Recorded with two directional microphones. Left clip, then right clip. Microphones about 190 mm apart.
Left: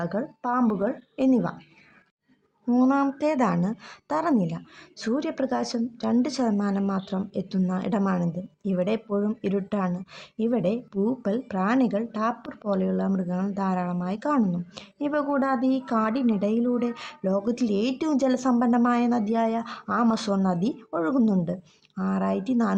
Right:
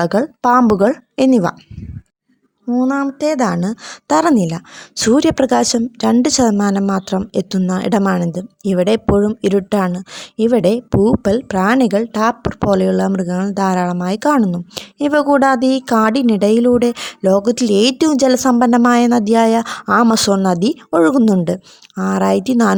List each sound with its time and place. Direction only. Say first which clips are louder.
0.0 s speech: right 14 dB; 45° right (ahead or behind)
2.6 s speech: right 5 dB; 25° right (ahead or behind); by 22.8 s 45° right (ahead or behind)